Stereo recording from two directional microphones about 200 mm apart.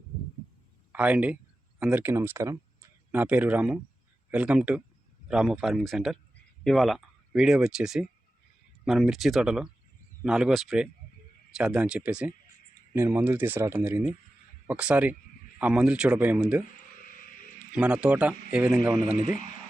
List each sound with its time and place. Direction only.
0.9 s a man's voice: 5° right (ahead or behind)
17.7 s a man's voice: 5° right (ahead or behind)